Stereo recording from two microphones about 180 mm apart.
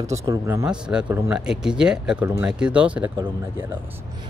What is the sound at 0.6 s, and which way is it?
Speech, 5° right (ahead or behind).